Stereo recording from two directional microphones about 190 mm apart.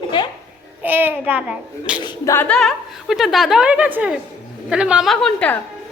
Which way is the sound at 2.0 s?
15° left (ahead or behind).